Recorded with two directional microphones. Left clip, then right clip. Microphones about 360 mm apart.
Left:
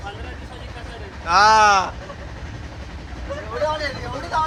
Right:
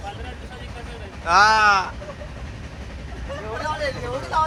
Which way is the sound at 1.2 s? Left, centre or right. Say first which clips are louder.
Left 2 dB; centre.